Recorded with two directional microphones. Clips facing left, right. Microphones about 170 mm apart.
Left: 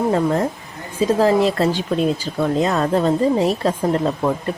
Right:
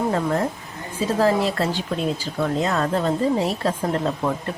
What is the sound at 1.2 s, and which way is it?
A woman's voice, 20° left (ahead or behind).